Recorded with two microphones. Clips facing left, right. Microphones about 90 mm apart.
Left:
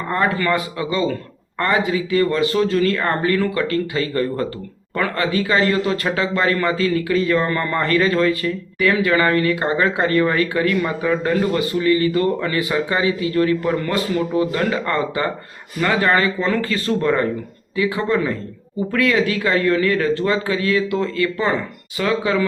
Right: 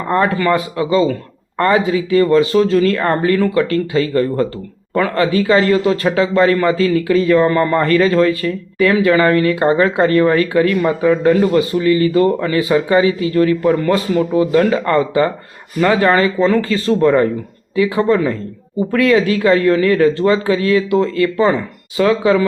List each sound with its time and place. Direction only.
0.1 s speech: 30° right (ahead or behind)